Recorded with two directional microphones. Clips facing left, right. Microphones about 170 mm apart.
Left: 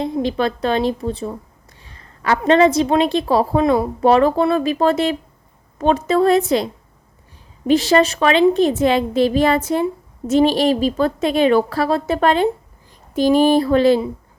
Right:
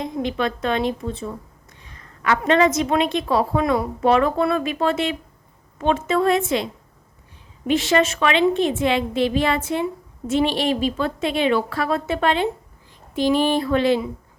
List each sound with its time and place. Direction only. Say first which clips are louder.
0.0 s a woman's voice: left 4 dB; 35° left (ahead or behind)
7.7 s a woman's voice: left 4 dB; 35° left (ahead or behind)